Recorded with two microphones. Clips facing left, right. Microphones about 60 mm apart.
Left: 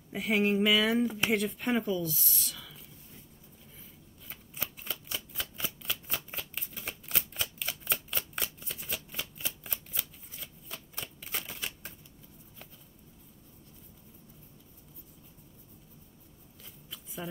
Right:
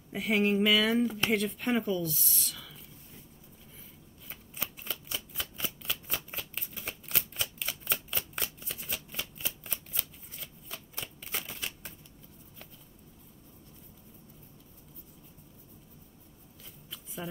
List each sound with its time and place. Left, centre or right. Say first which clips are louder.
0.1 s speech: even; centre
4.3 s shuffling cards: even; centre
16.9 s a sound: even; centre